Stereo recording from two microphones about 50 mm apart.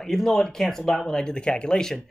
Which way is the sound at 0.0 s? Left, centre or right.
Centre.